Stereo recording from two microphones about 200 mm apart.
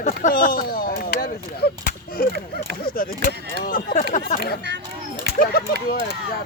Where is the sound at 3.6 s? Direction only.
45° left (ahead or behind).